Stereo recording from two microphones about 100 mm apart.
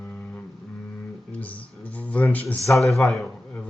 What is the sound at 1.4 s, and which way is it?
Speech, 15° left (ahead or behind).